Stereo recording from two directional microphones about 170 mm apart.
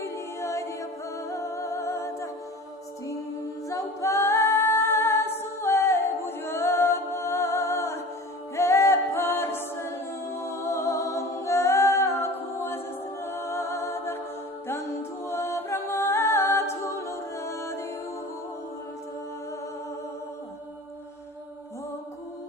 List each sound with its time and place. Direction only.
0.0 s music: 15° left (ahead or behind)
3.7 s a capella: 15° left (ahead or behind)
10.3 s humming: 15° left (ahead or behind)
13.2 s music: 15° left (ahead or behind)